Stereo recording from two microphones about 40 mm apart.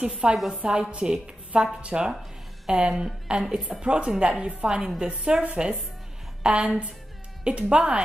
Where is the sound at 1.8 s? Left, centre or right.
Right.